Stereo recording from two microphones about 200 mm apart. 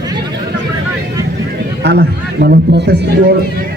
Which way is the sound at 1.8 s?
55° right (ahead or behind).